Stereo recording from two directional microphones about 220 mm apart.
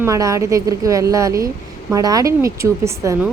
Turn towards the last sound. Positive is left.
turn(degrees=-15)  # may be behind; listen again after turning